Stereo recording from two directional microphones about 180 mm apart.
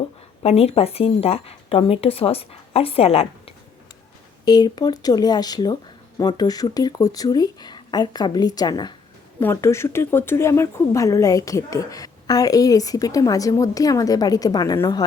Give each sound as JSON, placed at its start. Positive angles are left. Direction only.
{"t": 0.4, "sound": "speech", "side_deg": 35}
{"t": 4.4, "sound": "speech", "side_deg": 20}